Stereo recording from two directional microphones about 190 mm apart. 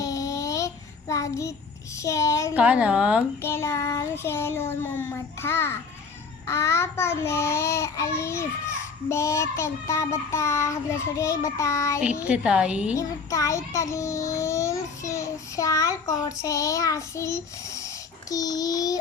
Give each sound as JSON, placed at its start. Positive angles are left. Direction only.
{"t": 0.0, "sound": "child singing", "side_deg": 15}
{"t": 2.6, "sound": "a woman's voice", "side_deg": -5}
{"t": 3.4, "sound": "child singing", "side_deg": 15}
{"t": 12.2, "sound": "a woman's voice", "side_deg": -5}
{"t": 13.0, "sound": "a child's voice", "side_deg": 15}